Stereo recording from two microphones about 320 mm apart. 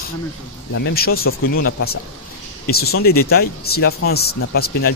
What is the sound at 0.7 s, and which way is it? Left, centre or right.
Speech, left.